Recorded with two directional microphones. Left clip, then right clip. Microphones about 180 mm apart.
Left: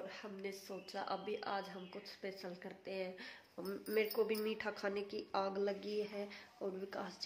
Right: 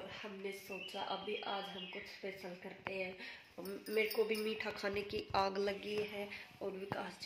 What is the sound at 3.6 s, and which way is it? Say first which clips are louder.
Speech: right 1 dB; 10° left (ahead or behind).